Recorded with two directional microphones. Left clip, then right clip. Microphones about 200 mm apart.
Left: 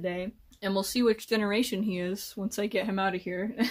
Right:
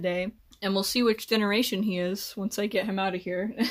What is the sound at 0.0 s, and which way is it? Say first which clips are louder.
Speech: right 4 dB; 35° right (ahead or behind).